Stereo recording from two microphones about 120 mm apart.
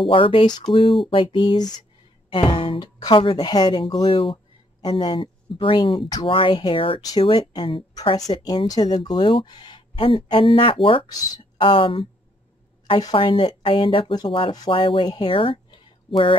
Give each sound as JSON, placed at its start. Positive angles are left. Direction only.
{"t": 0.1, "sound": "speech", "side_deg": 50}
{"t": 2.2, "sound": "a woman's voice", "side_deg": 45}
{"t": 7.0, "sound": "a woman's voice", "side_deg": 30}
{"t": 7.2, "sound": "speech", "side_deg": 45}
{"t": 8.2, "sound": "speech", "side_deg": 35}
{"t": 13.1, "sound": "speech", "side_deg": 45}